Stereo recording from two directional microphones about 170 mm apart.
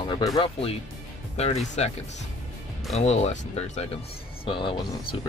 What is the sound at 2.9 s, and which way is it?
Speech, 40° left (ahead or behind).